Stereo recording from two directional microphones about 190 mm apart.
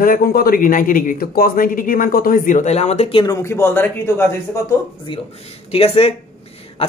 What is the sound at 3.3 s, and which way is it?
Speech, 15° left (ahead or behind).